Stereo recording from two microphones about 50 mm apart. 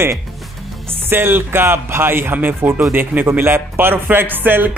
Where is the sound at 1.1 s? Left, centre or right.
Right.